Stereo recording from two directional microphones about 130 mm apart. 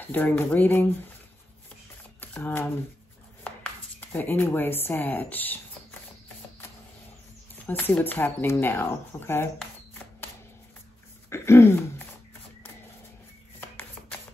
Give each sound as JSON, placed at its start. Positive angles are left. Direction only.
{"t": 0.0, "sound": "speech", "side_deg": 15}
{"t": 2.1, "sound": "shuffling cards", "side_deg": 15}
{"t": 4.0, "sound": "speech", "side_deg": 15}
{"t": 7.6, "sound": "speech", "side_deg": 15}
{"t": 11.2, "sound": "throat clearing", "side_deg": 20}